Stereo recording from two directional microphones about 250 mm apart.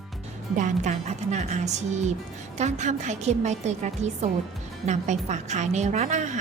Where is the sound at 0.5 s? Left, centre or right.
Right.